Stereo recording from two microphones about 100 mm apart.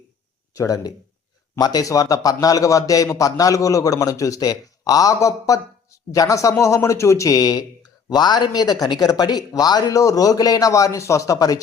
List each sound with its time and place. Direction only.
0.5 s a man's voice: 35° left (ahead or behind)